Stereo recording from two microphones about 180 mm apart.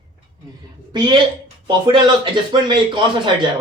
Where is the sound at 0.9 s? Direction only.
25° right (ahead or behind).